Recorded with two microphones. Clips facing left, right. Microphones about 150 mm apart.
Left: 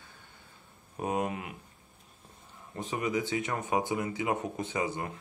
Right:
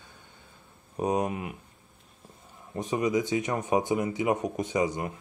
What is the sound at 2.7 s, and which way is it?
Speech, 15° right (ahead or behind).